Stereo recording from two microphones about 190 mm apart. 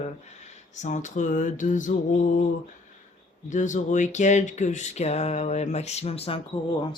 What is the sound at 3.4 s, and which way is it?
Speech, 40° left (ahead or behind).